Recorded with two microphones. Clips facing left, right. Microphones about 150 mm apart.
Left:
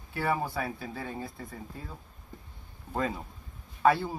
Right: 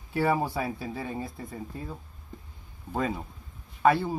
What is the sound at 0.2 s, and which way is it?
Speech, 25° right (ahead or behind).